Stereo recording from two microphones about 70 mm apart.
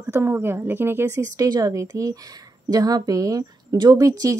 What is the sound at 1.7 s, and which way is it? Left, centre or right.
Speech, right.